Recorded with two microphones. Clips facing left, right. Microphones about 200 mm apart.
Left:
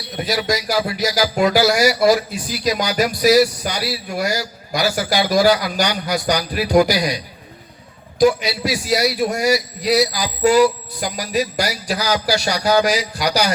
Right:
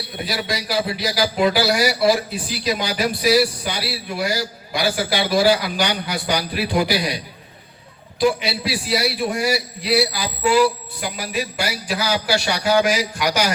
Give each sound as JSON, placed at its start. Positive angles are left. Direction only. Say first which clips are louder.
{"t": 0.3, "sound": "a man's voice", "louder": "left 5 dB", "side_deg": 45}
{"t": 8.2, "sound": "a man's voice", "louder": "left 4 dB", "side_deg": 45}